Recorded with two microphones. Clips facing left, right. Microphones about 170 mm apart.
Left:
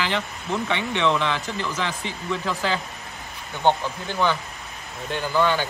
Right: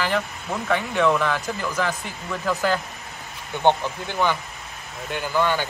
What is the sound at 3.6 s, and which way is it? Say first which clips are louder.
Speech: right 1 dB; 15° right (ahead or behind).